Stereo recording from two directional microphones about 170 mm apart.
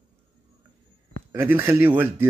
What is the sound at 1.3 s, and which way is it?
Speech, 15° right (ahead or behind).